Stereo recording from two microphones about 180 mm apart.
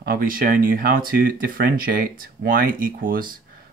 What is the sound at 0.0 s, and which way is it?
Speech, 55° right (ahead or behind).